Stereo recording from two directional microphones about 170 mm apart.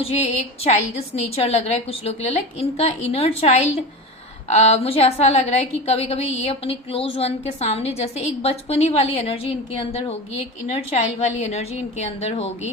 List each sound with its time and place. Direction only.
0.0 s a woman's voice: 40° left (ahead or behind)